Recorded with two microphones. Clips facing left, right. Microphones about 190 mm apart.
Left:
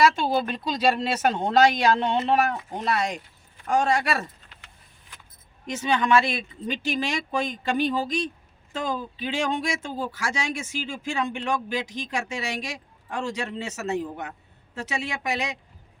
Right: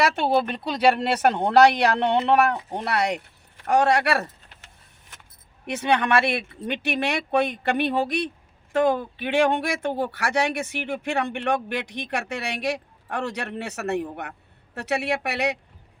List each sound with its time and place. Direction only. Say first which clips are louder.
0.2 s speech: right 3 dB; 65° right (ahead or behind)
5.6 s speech: right 1 dB; 65° right (ahead or behind)